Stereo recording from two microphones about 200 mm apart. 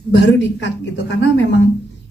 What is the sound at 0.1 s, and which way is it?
Speech, 60° left (ahead or behind).